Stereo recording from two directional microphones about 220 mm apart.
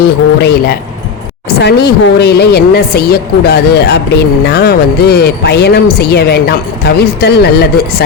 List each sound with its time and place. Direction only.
0.4 s speech: 45° left (ahead or behind)